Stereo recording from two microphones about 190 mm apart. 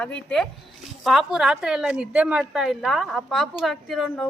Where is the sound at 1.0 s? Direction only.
Centre (ahead or behind).